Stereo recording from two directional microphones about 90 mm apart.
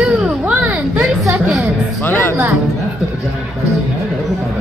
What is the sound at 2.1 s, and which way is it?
Music, 25° left (ahead or behind).